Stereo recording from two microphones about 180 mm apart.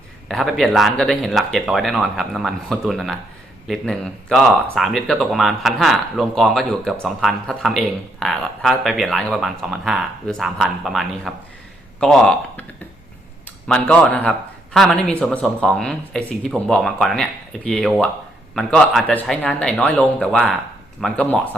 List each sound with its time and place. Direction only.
0.3 s speech: centre (ahead or behind)
13.7 s speech: 5° left (ahead or behind)